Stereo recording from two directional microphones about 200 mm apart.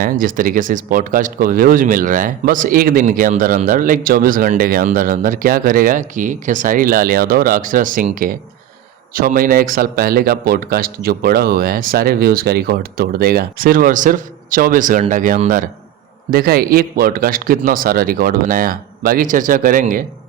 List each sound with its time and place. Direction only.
0.0 s speech: 45° right (ahead or behind)